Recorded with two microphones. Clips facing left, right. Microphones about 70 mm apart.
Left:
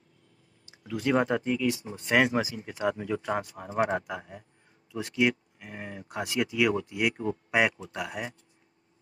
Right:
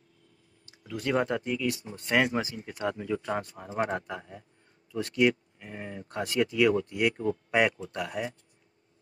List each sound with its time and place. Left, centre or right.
0.7 s speech: left